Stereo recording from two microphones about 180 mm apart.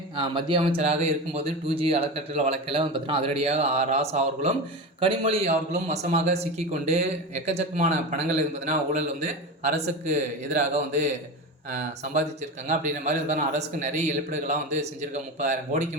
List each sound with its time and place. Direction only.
0.2 s a man's voice: 25° right (ahead or behind)